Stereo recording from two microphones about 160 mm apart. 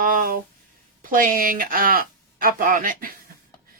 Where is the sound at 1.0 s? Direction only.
60° right (ahead or behind).